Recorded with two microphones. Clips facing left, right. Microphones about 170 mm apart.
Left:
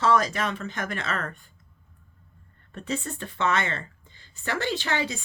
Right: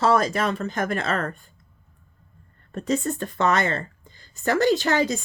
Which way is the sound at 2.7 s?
40° right (ahead or behind).